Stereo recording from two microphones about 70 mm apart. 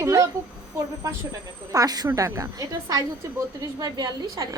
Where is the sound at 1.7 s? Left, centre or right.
Right.